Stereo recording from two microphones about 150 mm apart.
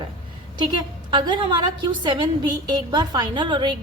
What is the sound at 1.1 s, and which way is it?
A woman's voice, 30° right (ahead or behind).